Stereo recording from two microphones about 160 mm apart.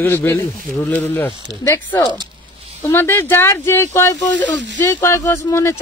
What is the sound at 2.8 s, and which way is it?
Speech, 15° left (ahead or behind).